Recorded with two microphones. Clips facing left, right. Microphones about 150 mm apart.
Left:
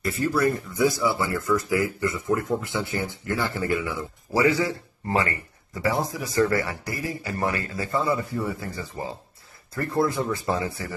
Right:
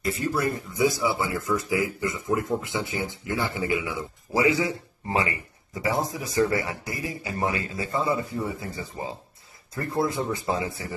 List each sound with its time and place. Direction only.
0.0 s a man's voice: 20° right (ahead or behind)